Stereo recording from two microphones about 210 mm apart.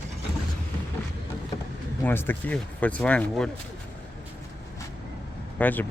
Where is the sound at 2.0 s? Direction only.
10° left (ahead or behind).